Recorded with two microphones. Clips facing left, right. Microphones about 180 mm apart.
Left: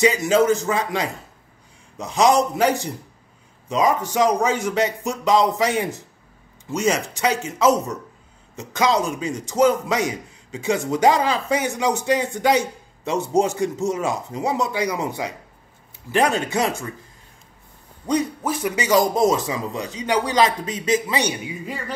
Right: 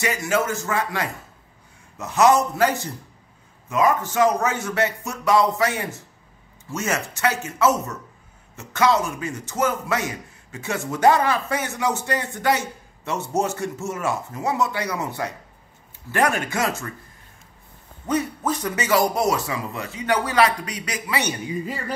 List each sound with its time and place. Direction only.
0.0 s a man's voice: 20° left (ahead or behind)
18.0 s a man's voice: 15° left (ahead or behind)